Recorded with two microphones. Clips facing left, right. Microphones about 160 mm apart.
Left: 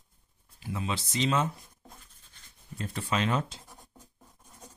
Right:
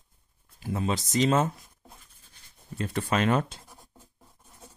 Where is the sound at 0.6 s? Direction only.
45° right (ahead or behind).